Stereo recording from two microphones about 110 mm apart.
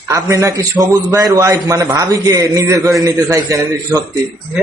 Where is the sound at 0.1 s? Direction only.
30° right (ahead or behind).